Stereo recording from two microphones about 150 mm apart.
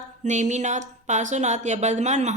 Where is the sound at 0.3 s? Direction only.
50° right (ahead or behind).